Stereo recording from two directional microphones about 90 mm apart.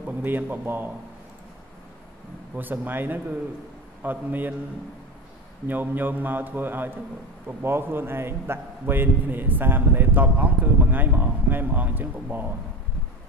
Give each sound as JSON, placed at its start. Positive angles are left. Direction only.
{"t": 0.0, "sound": "a man's voice", "side_deg": -20}
{"t": 2.5, "sound": "a man's voice", "side_deg": -20}
{"t": 5.7, "sound": "a man's voice", "side_deg": -20}